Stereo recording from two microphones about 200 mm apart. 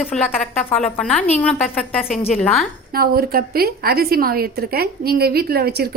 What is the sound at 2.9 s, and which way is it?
A woman's voice, 50° right (ahead or behind).